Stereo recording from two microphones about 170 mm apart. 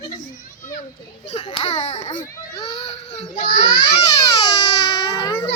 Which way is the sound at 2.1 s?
20° left (ahead or behind).